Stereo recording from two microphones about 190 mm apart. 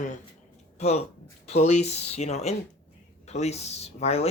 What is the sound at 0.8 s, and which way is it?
Speech, 35° left (ahead or behind).